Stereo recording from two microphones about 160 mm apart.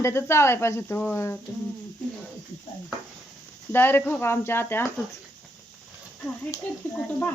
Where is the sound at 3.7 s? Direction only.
15° left (ahead or behind).